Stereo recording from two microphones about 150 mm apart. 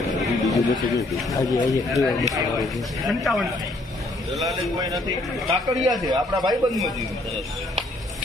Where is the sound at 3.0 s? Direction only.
Centre (ahead or behind).